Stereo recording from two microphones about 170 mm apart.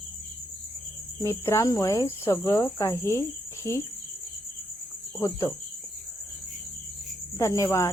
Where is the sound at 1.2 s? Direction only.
15° left (ahead or behind).